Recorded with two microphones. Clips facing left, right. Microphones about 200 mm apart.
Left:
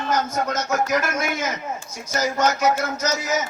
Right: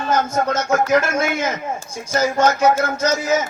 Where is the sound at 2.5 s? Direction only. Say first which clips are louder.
Right 4 dB; 50° right (ahead or behind).